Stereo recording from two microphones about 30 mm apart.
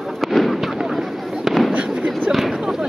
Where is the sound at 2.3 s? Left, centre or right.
Centre.